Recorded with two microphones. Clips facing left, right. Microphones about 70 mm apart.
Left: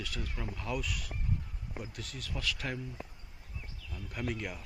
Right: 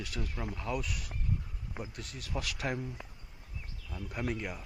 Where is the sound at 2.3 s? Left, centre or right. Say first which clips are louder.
Right 2 dB; centre.